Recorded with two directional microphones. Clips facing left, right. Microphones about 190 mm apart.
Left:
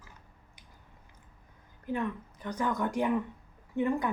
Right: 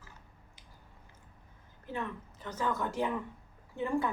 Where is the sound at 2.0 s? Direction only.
15° left (ahead or behind).